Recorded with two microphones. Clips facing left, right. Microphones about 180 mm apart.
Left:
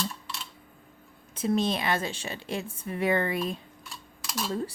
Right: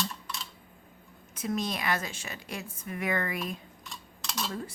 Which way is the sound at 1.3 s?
30° left (ahead or behind).